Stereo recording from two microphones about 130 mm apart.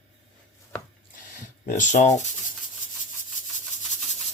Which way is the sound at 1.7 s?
70° left (ahead or behind).